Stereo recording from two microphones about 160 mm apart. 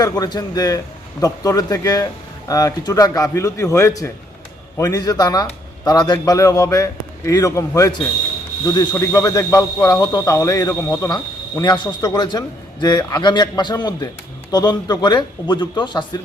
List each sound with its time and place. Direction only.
0.0 s speech: 25° left (ahead or behind)